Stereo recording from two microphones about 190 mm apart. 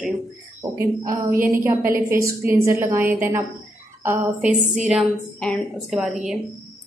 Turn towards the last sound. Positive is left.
turn(degrees=0)  # may be behind; listen again after turning